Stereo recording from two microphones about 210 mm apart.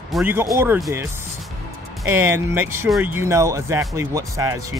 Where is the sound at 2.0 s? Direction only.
10° right (ahead or behind).